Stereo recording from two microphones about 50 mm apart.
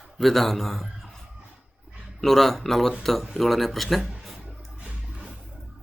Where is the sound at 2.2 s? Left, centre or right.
Centre.